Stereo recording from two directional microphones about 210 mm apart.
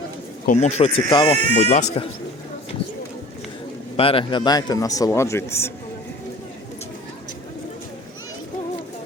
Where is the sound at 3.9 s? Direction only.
25° left (ahead or behind).